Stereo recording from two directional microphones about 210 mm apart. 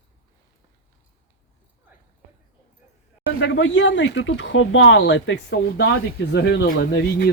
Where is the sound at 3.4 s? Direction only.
60° left (ahead or behind).